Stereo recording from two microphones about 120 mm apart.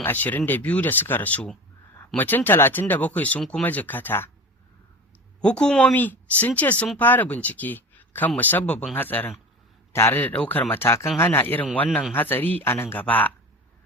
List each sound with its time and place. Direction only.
0.0 s speech: 15° left (ahead or behind)
5.4 s a man's voice: 10° left (ahead or behind)